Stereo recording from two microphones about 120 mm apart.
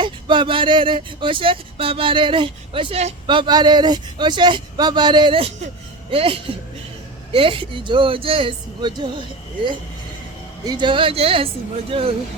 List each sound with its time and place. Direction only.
0.0 s speech: 40° right (ahead or behind); by 3.2 s 60° right (ahead or behind)
3.2 s speech: 40° right (ahead or behind)
10.7 s speech: 40° right (ahead or behind)